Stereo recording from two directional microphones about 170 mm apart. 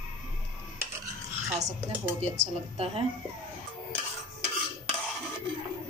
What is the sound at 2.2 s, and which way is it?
Speech, 40° right (ahead or behind).